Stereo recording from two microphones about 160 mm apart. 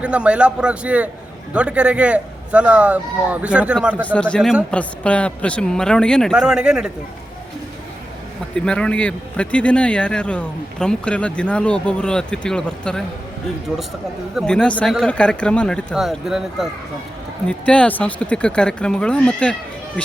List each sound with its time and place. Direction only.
0.0 s a man's voice: 5° right (ahead or behind)
4.0 s a man's voice: 10° left (ahead or behind)
8.5 s speech: 5° left (ahead or behind)
14.3 s a man's voice: 5° left (ahead or behind)